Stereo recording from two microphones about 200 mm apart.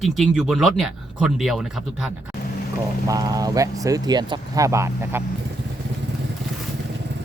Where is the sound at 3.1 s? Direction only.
20° right (ahead or behind).